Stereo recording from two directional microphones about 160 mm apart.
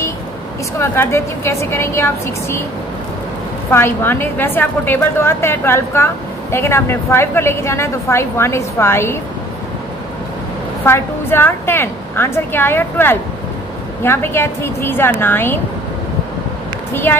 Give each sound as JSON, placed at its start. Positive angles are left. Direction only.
{"t": 0.7, "sound": "a woman's voice", "side_deg": 15}
{"t": 3.7, "sound": "a woman's voice", "side_deg": 15}
{"t": 10.9, "sound": "a woman's voice", "side_deg": 15}
{"t": 16.9, "sound": "a woman's voice", "side_deg": 15}